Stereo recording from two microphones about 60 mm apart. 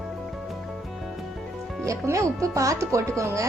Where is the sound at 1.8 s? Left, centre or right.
Right.